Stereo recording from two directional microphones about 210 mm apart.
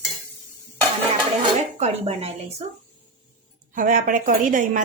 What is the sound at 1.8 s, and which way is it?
Speech, 30° right (ahead or behind).